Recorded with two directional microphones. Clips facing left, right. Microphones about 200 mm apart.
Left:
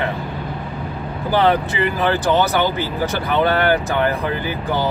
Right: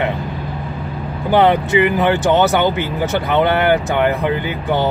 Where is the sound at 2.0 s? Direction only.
20° right (ahead or behind).